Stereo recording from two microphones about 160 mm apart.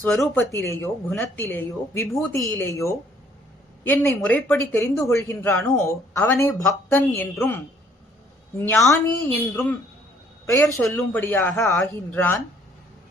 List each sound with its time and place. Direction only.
0.0 s speech: 5° left (ahead or behind)
0.3 s speech: 15° left (ahead or behind)
8.7 s speech: 15° left (ahead or behind)
10.8 s speech: centre (ahead or behind)
11.2 s speech: 10° left (ahead or behind)